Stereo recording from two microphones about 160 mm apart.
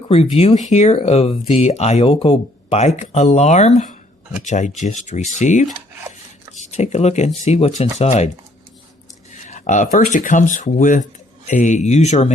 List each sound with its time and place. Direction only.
0.1 s speech: 40° left (ahead or behind)
9.5 s speech: 50° left (ahead or behind)